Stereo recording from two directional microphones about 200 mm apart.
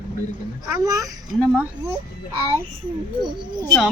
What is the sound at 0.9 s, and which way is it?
Speech, 15° right (ahead or behind).